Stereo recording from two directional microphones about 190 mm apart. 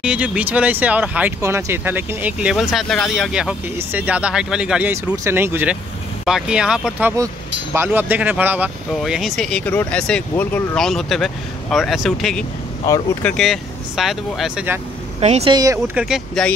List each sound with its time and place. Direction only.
0.0 s speech: 5° right (ahead or behind)
12.8 s speech: 20° left (ahead or behind)
13.4 s speech: centre (ahead or behind)
15.1 s speech: 35° right (ahead or behind)
15.5 s speech: 15° right (ahead or behind)